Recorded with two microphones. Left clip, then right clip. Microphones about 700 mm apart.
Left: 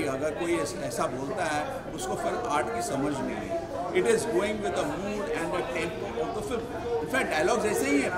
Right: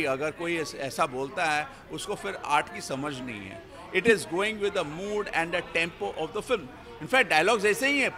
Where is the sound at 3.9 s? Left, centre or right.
Right.